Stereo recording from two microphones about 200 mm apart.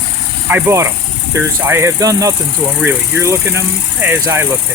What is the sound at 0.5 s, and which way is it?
Speech, 15° right (ahead or behind).